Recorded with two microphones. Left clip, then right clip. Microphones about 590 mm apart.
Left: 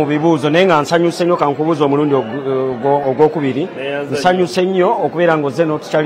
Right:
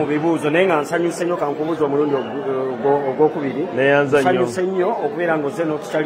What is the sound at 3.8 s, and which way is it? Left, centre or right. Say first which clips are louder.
Speech: right 11 dB; right.